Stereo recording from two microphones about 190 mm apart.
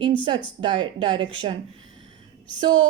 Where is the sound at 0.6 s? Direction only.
25° right (ahead or behind).